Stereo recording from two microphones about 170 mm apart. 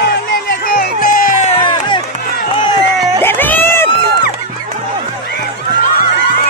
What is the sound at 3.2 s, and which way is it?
Cat, 10° left (ahead or behind).